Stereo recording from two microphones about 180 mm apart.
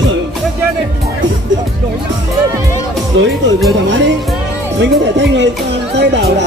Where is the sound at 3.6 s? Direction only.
85° right.